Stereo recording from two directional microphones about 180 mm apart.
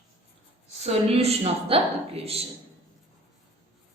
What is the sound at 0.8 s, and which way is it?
Speech, 35° right (ahead or behind).